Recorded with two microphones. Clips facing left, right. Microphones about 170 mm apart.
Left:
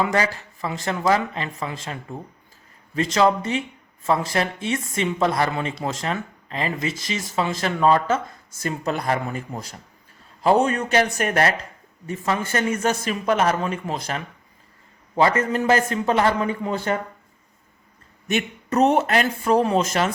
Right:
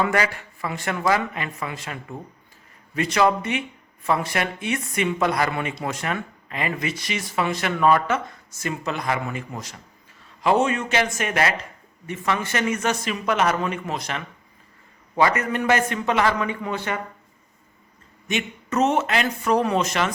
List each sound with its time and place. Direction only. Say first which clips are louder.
0.0 s a man's voice: left 1 dB; 25° left (ahead or behind); by 11.5 s 40° left (ahead or behind)
12.2 s a man's voice: left 1 dB; 30° left (ahead or behind)
18.3 s a man's voice: left 3 dB; 40° left (ahead or behind)
19.4 s a man's voice: left 1 dB; 30° left (ahead or behind)